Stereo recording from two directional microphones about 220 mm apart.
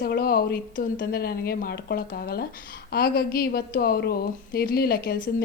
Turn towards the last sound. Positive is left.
turn(degrees=40)  # may be behind; listen again after turning